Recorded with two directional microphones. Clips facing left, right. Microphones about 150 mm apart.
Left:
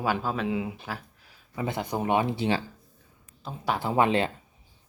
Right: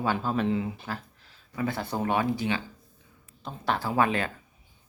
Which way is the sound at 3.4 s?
5° left (ahead or behind).